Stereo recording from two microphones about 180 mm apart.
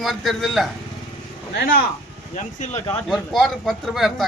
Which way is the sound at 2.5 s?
40° left (ahead or behind).